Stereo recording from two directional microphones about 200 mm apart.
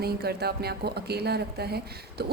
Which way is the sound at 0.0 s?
50° right (ahead or behind).